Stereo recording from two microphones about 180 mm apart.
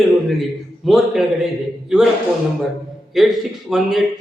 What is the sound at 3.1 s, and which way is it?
Speech, centre (ahead or behind).